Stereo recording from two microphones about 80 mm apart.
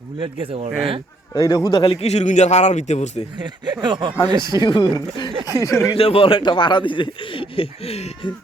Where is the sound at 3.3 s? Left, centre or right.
Right.